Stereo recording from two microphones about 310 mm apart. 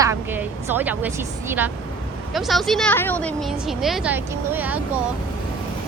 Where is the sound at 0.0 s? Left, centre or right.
Centre.